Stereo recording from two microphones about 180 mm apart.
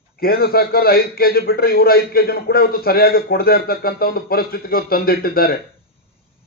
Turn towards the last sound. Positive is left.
turn(degrees=55)  # may be behind; listen again after turning